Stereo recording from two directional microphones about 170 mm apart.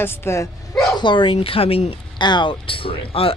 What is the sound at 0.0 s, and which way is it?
Speech, 15° left (ahead or behind).